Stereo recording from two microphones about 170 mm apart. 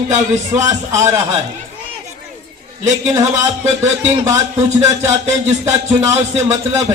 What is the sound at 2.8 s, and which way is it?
Music, 20° right (ahead or behind).